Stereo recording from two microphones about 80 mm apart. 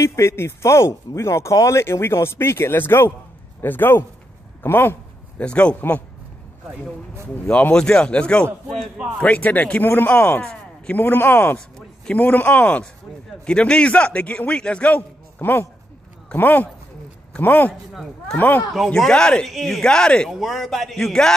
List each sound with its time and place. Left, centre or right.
0.0 s a man's voice: left
5.4 s a man's voice: centre
7.4 s a man's voice: centre
18.9 s a man's voice: centre
20.2 s a man's voice: centre